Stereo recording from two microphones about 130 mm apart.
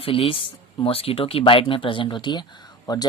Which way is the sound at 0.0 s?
45° left (ahead or behind).